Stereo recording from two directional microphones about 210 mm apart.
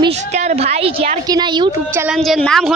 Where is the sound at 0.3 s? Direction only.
30° right (ahead or behind).